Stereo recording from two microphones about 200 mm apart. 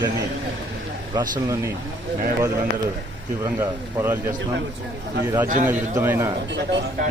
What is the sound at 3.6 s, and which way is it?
Speech, 10° right (ahead or behind).